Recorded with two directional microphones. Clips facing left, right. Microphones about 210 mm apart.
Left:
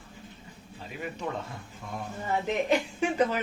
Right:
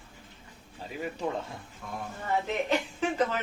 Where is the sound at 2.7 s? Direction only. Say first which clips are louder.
Left 2 dB; 10° left (ahead or behind).